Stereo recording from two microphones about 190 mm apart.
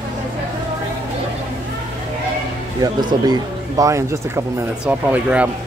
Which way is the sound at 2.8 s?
20° right (ahead or behind).